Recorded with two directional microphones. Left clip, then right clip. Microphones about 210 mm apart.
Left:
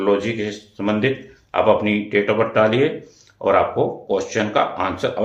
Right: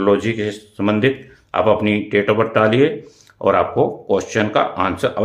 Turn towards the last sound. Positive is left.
turn(degrees=-45)  # may be behind; listen again after turning